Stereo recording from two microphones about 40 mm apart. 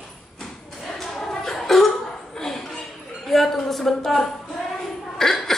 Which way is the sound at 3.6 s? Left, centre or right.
Centre.